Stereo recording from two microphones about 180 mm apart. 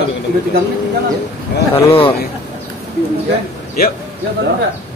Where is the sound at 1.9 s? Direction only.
30° left (ahead or behind).